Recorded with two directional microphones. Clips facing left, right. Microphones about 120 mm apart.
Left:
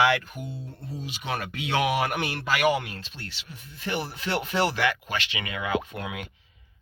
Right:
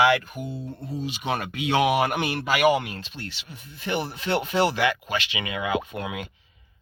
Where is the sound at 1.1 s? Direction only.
20° right (ahead or behind).